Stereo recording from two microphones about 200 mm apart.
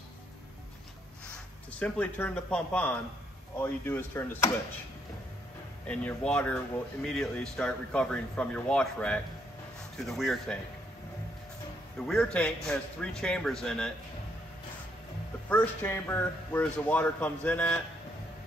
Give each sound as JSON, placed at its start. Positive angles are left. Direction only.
{"t": 1.8, "sound": "speech", "side_deg": 5}
{"t": 5.9, "sound": "speech", "side_deg": 5}
{"t": 12.1, "sound": "speech", "side_deg": 5}
{"t": 15.5, "sound": "speech", "side_deg": 10}